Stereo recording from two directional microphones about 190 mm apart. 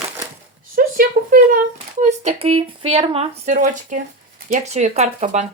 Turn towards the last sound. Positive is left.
turn(degrees=-35)  # may be behind; listen again after turning